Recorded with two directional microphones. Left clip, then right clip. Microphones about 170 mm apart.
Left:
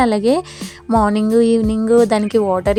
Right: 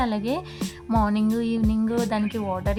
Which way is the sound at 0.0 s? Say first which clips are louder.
Left 11 dB; 50° left (ahead or behind).